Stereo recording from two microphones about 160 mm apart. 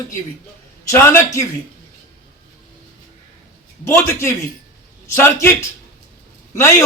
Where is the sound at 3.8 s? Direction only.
15° left (ahead or behind).